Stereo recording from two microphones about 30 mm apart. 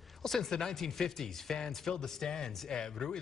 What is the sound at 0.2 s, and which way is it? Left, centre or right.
Speech, centre.